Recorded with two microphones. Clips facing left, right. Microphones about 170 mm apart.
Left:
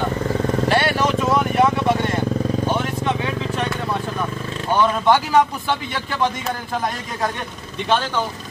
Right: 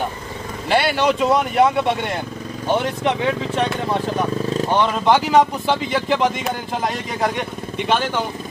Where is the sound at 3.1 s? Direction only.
20° right (ahead or behind).